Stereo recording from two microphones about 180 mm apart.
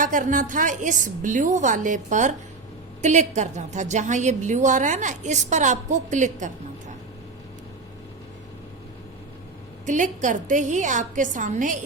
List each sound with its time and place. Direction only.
0.0 s a woman's voice: 45° right (ahead or behind)
9.8 s a woman's voice: 45° right (ahead or behind)